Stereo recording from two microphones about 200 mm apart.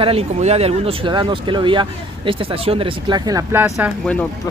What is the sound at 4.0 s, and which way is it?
Speech, 5° left (ahead or behind).